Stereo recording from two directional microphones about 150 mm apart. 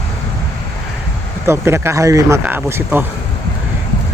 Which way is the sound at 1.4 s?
15° right (ahead or behind).